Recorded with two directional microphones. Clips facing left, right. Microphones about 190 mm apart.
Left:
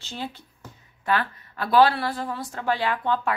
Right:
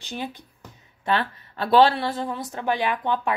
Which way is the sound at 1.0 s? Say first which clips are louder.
Right 1 dB; 25° right (ahead or behind).